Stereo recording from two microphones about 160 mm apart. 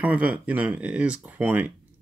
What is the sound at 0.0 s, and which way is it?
Speech, 10° right (ahead or behind).